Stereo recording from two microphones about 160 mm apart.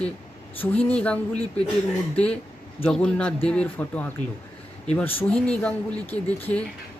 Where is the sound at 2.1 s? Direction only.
10° left (ahead or behind).